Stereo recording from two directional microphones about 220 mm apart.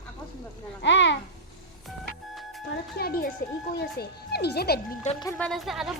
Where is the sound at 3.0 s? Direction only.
45° left (ahead or behind).